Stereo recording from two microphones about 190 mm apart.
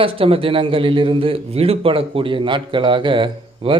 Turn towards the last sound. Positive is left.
turn(degrees=-25)  # may be behind; listen again after turning